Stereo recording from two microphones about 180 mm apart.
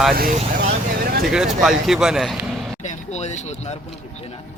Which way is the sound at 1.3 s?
Centre (ahead or behind).